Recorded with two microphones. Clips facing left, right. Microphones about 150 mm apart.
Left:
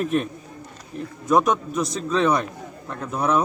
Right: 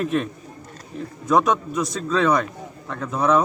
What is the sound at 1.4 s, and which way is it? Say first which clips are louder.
Speech: even; 20° left (ahead or behind).